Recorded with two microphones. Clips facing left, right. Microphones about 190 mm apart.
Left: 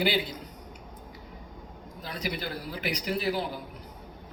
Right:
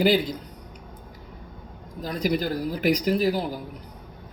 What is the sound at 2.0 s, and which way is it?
A man's voice, 40° right (ahead or behind).